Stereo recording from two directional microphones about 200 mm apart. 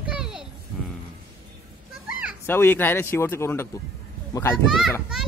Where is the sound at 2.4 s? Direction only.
10° left (ahead or behind).